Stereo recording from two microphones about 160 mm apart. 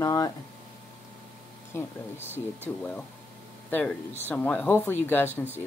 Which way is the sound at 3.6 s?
10° left (ahead or behind).